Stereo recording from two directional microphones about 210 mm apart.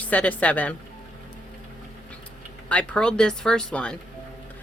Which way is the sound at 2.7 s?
5° left (ahead or behind).